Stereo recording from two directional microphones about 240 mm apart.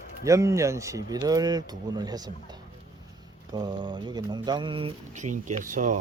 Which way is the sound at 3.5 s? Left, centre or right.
Centre.